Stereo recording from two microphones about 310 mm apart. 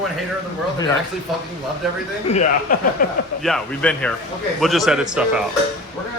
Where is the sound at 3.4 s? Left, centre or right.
Centre.